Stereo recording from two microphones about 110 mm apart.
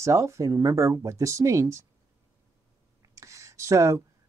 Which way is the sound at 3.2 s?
30° right (ahead or behind).